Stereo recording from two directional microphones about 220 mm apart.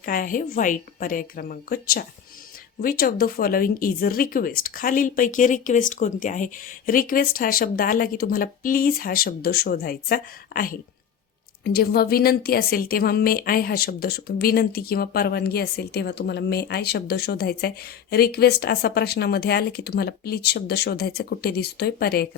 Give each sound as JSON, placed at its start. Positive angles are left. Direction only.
{"t": 0.0, "sound": "a woman's voice", "side_deg": 40}